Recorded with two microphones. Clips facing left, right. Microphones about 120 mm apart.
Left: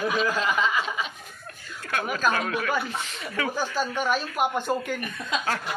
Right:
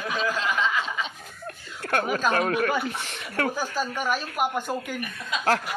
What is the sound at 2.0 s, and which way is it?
Speech, 25° right (ahead or behind).